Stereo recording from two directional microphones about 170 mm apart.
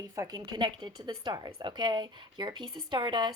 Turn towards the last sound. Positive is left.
turn(degrees=-25)  # may be behind; listen again after turning